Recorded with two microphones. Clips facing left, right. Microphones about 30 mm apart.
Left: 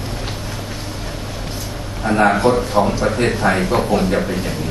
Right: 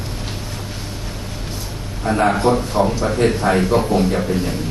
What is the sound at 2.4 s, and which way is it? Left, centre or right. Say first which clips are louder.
A man's voice: left 1 dB; centre.